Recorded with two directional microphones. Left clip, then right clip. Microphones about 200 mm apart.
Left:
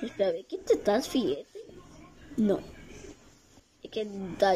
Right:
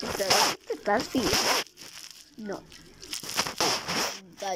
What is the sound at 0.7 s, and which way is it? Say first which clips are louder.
Speech: left 2 dB; 10° left (ahead or behind).